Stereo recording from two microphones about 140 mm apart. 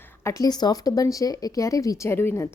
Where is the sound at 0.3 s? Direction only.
25° left (ahead or behind).